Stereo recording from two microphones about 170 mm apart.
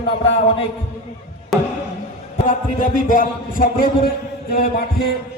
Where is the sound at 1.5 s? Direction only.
Centre (ahead or behind).